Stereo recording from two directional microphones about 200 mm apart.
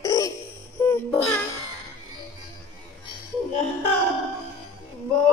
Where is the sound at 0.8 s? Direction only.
10° left (ahead or behind).